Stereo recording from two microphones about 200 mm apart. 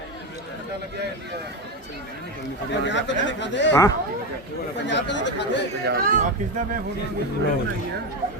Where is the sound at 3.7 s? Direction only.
15° left (ahead or behind).